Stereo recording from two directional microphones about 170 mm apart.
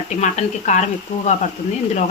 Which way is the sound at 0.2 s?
45° left (ahead or behind).